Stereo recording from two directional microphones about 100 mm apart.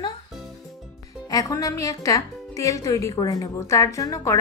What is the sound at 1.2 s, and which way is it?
Speech, 35° left (ahead or behind).